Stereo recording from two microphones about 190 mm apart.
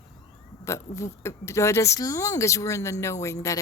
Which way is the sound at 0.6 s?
15° left (ahead or behind).